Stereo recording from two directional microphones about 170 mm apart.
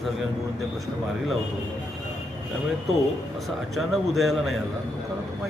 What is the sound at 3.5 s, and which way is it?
Speech, centre (ahead or behind).